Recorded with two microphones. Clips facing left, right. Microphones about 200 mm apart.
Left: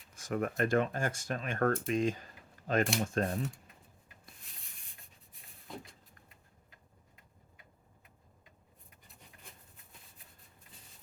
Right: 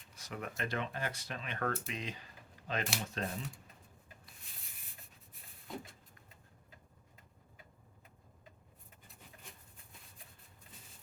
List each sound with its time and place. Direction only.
0.1 s speech: 50° left (ahead or behind)
5.7 s vehicle: centre (ahead or behind)